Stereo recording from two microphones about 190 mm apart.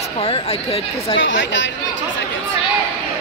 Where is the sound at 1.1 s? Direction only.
75° left (ahead or behind).